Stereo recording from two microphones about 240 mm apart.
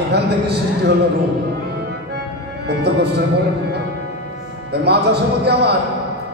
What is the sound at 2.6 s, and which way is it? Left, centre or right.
Speech, right.